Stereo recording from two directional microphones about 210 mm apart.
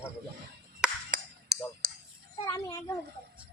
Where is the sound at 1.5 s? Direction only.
50° right (ahead or behind).